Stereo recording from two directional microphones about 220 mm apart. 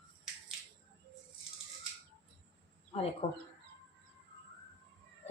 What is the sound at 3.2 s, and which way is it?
Speech, 25° left (ahead or behind).